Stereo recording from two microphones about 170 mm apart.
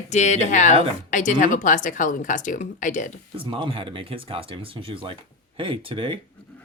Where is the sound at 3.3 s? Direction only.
30° right (ahead or behind).